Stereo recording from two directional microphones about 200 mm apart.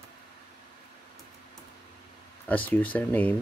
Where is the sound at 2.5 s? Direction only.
5° left (ahead or behind).